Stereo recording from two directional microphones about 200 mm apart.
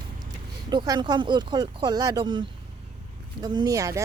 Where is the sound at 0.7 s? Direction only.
20° right (ahead or behind).